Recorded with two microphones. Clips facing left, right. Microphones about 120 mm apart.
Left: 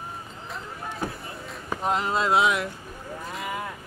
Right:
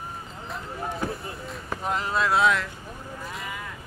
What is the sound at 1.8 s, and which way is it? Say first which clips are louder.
Speech: left 2 dB; 20° left (ahead or behind).